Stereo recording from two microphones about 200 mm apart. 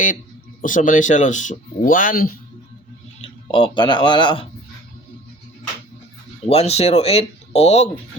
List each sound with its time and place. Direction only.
0.6 s speech: 40° left (ahead or behind)
3.5 s speech: 25° left (ahead or behind)
6.5 s speech: 30° left (ahead or behind)